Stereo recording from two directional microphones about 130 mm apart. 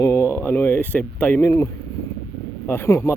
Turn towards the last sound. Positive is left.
turn(degrees=20)  # may be behind; listen again after turning